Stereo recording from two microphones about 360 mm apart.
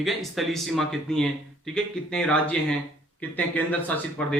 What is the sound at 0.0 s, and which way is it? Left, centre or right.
Speech, centre.